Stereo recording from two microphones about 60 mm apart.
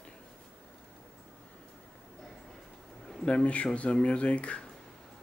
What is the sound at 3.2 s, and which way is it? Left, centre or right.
Speech, left.